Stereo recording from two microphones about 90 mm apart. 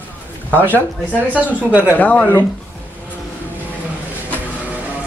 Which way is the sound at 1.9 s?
15° left (ahead or behind).